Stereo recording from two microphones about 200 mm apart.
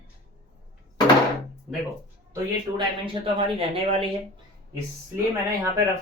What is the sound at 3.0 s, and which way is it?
Speech, 25° right (ahead or behind).